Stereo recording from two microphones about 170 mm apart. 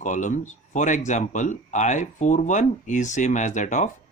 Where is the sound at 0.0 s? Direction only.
45° left (ahead or behind).